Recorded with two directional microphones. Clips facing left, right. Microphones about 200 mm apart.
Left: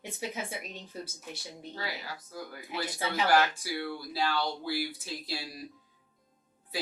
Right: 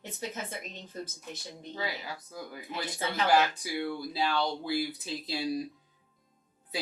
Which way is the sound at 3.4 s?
20° right (ahead or behind).